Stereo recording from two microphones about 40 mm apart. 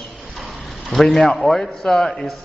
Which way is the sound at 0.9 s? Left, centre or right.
Centre.